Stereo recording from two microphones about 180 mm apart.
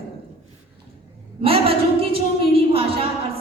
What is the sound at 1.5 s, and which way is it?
Speech, 30° right (ahead or behind).